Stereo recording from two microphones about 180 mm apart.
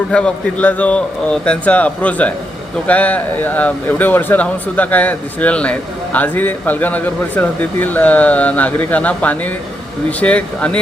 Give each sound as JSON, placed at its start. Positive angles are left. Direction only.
{"t": 0.1, "sound": "speech", "side_deg": 5}